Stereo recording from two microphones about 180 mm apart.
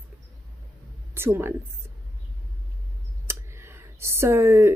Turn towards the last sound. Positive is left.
turn(degrees=-15)  # may be behind; listen again after turning